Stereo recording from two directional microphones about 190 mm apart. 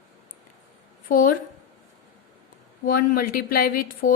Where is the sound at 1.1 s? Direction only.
45° left (ahead or behind).